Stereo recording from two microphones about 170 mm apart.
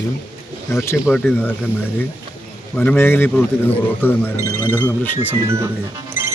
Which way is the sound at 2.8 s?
10° left (ahead or behind).